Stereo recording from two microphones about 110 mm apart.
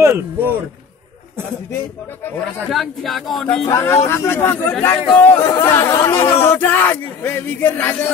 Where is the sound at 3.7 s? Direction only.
25° left (ahead or behind).